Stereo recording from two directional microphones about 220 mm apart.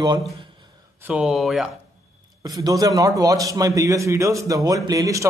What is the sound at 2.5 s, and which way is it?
A man's voice, 15° right (ahead or behind).